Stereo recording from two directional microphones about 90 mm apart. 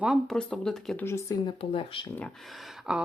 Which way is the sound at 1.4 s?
90° left.